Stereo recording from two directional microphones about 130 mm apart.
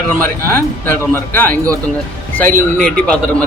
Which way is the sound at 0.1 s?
15° left (ahead or behind).